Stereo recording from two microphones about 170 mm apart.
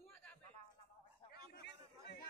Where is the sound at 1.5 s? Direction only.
90° left.